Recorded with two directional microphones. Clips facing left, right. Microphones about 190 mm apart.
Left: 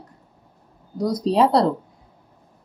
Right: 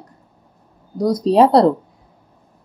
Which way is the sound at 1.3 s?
45° right (ahead or behind).